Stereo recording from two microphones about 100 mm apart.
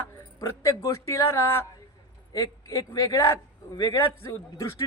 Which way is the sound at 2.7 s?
35° left (ahead or behind).